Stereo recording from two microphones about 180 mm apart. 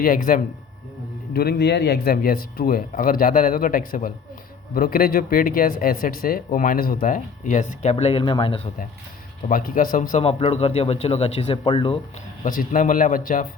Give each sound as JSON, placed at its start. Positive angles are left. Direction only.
{"t": 0.0, "sound": "speech", "side_deg": 50}
{"t": 1.3, "sound": "speech", "side_deg": 60}
{"t": 9.5, "sound": "a man's voice", "side_deg": 50}
{"t": 12.5, "sound": "speech", "side_deg": 50}